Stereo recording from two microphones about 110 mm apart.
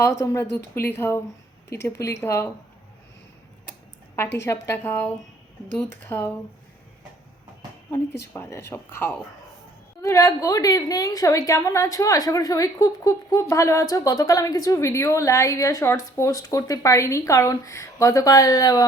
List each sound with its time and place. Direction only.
0.0 s a woman's voice: 25° left (ahead or behind)
4.1 s a woman's voice: 20° left (ahead or behind)
7.9 s a woman's voice: 25° left (ahead or behind)